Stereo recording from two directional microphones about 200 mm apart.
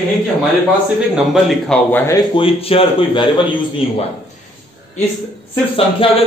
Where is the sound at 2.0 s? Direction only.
20° left (ahead or behind).